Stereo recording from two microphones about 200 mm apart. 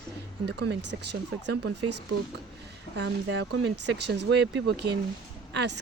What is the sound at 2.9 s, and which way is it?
Speech, 60° right (ahead or behind).